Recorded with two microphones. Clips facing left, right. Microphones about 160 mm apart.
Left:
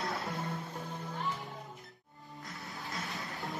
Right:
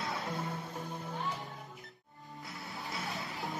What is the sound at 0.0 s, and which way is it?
Music, centre (ahead or behind).